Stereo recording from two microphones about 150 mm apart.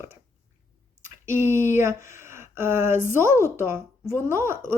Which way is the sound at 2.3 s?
15° right (ahead or behind).